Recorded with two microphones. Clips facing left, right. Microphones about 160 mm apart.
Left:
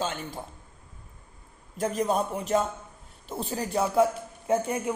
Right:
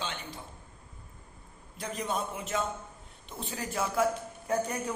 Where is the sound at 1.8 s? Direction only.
45° left (ahead or behind); by 5.0 s 25° left (ahead or behind).